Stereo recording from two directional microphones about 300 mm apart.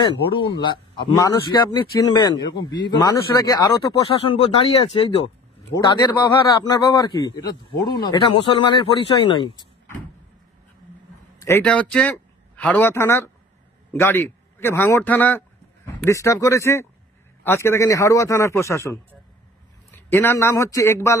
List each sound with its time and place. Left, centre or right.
0.0 s a man's voice: centre
11.4 s a man's voice: centre